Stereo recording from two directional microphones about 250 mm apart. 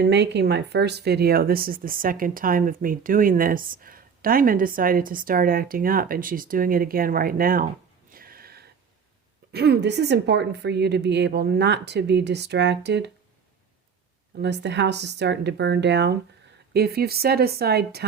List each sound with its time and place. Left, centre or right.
0.1 s speech: right
8.1 s gasp: right
9.5 s a woman's voice: right
14.3 s a woman's voice: right